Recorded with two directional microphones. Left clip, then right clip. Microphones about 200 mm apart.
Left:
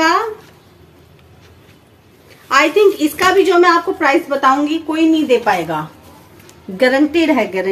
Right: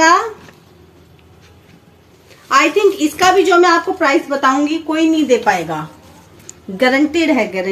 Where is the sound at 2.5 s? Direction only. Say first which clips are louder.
Left 1 dB; 10° left (ahead or behind).